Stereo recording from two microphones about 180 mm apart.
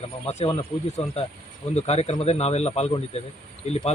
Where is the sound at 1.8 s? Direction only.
35° left (ahead or behind).